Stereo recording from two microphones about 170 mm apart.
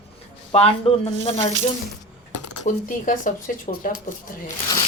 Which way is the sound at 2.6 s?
50° left (ahead or behind).